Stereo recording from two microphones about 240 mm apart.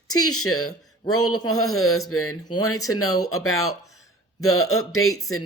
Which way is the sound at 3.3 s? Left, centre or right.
Left.